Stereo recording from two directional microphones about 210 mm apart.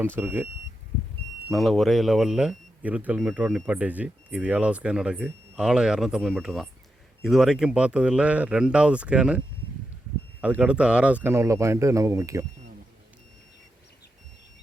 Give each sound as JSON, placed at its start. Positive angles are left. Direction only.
{"t": 0.0, "sound": "speech", "side_deg": -10}
{"t": 1.5, "sound": "speech", "side_deg": 0}
{"t": 10.4, "sound": "speech", "side_deg": -5}